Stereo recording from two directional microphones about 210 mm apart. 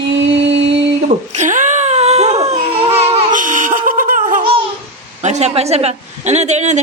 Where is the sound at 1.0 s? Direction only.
35° right (ahead or behind).